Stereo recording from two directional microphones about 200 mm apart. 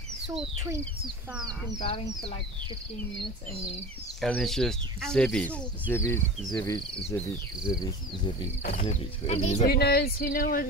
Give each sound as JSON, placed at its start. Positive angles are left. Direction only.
{"t": 1.7, "sound": "speech", "side_deg": 20}
{"t": 4.2, "sound": "speech", "side_deg": 0}
{"t": 7.8, "sound": "speech", "side_deg": 20}
{"t": 9.7, "sound": "speech", "side_deg": 55}